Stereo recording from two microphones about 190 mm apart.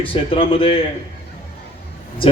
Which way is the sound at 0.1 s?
30° left (ahead or behind).